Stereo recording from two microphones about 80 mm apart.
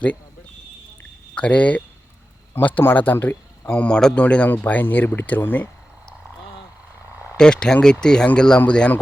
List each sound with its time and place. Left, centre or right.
1.4 s speech: centre
3.7 s speech: centre
7.3 s speech: centre